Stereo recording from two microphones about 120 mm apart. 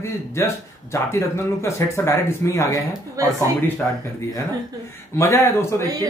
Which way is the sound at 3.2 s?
30° right (ahead or behind).